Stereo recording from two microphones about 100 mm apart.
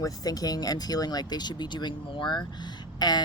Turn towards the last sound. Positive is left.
turn(degrees=45)  # may be behind; listen again after turning